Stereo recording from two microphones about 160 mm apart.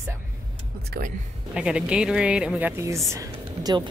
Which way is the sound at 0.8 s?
80° right.